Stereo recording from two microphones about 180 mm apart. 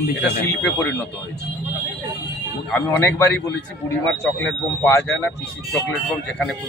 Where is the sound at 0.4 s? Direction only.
10° left (ahead or behind).